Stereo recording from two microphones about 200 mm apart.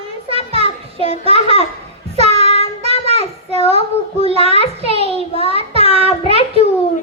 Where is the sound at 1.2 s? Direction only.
30° right (ahead or behind).